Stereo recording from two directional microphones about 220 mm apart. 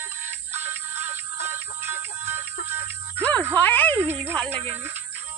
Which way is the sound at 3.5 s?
5° left (ahead or behind).